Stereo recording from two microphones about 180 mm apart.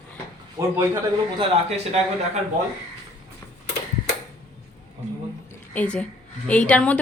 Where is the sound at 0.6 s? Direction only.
20° right (ahead or behind).